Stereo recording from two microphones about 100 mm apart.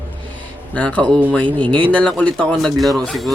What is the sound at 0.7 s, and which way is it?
Speech, 15° left (ahead or behind).